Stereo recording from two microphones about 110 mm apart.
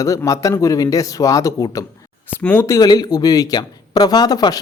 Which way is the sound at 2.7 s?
35° left (ahead or behind).